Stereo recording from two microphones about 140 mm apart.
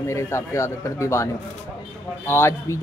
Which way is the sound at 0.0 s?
20° left (ahead or behind).